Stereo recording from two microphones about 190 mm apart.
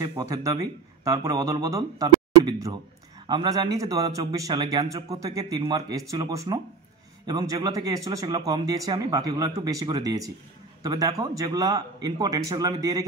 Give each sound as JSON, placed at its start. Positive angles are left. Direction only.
{"t": 0.0, "sound": "speech", "side_deg": -20}